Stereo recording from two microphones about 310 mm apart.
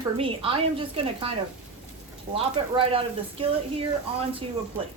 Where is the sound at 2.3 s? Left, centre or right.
Centre.